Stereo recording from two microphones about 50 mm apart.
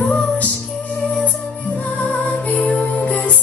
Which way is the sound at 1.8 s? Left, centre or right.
Left.